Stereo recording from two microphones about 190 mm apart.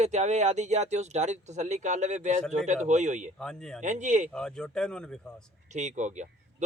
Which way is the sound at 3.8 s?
40° right (ahead or behind).